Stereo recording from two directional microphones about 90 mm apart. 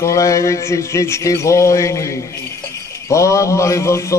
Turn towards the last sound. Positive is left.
turn(degrees=35)  # may be behind; listen again after turning